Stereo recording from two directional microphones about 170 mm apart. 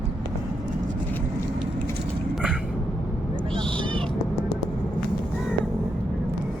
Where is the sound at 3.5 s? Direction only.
30° right (ahead or behind).